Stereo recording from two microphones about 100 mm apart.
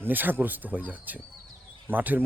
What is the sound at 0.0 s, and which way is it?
Speech, 20° right (ahead or behind).